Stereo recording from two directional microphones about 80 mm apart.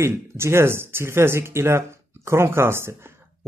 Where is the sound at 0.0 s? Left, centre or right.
Right.